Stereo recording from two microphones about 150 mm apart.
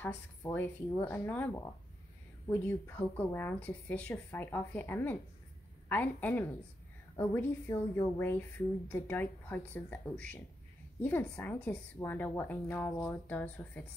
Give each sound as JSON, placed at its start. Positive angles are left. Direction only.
{"t": 0.0, "sound": "a woman's voice", "side_deg": 15}